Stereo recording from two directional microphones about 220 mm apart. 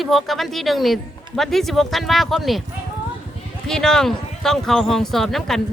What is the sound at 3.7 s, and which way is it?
Speech, centre (ahead or behind).